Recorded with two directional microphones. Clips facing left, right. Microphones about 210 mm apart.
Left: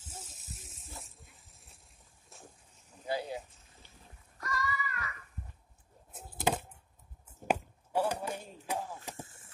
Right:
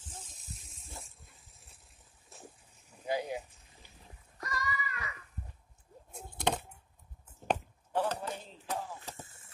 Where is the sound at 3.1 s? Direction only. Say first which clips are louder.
Right 1 dB; 15° right (ahead or behind).